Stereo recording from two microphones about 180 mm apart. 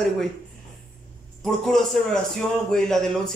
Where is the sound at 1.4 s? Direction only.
Centre (ahead or behind).